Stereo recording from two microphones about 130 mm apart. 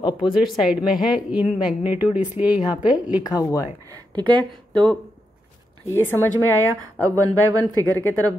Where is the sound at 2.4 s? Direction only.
10° right (ahead or behind).